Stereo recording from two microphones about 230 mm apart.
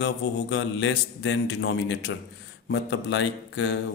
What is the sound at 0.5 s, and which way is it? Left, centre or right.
Speech, left.